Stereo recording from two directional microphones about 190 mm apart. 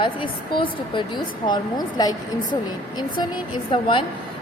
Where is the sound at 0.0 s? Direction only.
25° left (ahead or behind).